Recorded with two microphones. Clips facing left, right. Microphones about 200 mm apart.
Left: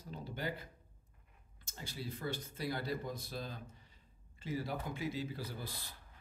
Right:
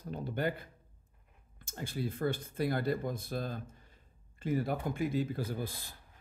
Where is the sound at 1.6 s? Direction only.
55° right (ahead or behind).